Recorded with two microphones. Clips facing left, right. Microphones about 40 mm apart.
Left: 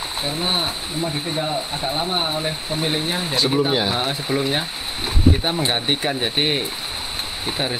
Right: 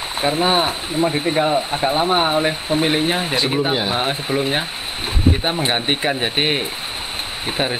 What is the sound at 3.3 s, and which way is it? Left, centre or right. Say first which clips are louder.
Speech: left 4 dB; right.